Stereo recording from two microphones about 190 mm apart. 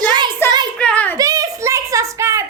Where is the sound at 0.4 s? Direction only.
10° left (ahead or behind).